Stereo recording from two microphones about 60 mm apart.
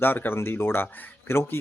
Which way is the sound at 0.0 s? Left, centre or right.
Left.